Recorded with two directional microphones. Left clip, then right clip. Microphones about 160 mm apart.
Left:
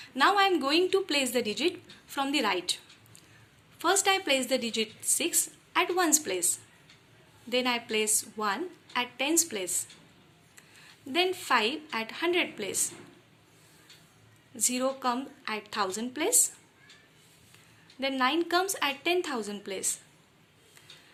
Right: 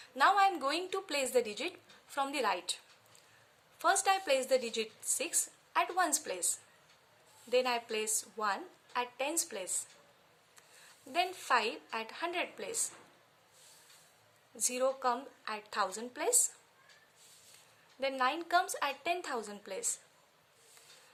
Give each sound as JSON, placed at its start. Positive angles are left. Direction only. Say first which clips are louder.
{"t": 0.0, "sound": "a woman's voice", "louder": "left 3 dB", "side_deg": -40}
{"t": 3.8, "sound": "a woman's voice", "louder": "left 4 dB", "side_deg": -45}
{"t": 7.5, "sound": "a woman's voice", "louder": "left 3 dB", "side_deg": -40}
{"t": 11.1, "sound": "a woman's voice", "louder": "left 5 dB", "side_deg": -45}
{"t": 14.5, "sound": "a woman's voice", "louder": "left 3 dB", "side_deg": -45}
{"t": 18.0, "sound": "a woman's voice", "louder": "left 5 dB", "side_deg": -45}